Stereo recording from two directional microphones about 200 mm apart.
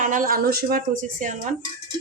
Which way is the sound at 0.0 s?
40° right (ahead or behind).